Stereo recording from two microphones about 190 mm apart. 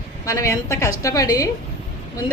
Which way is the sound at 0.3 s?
15° left (ahead or behind).